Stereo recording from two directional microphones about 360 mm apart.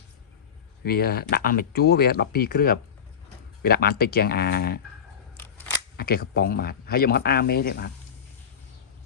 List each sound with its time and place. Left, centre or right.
0.9 s speech: left
6.0 s speech: left